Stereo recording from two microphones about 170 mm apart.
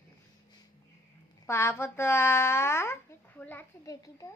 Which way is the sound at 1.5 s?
15° left (ahead or behind).